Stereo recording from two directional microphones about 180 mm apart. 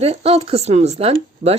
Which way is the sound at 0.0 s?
35° right (ahead or behind).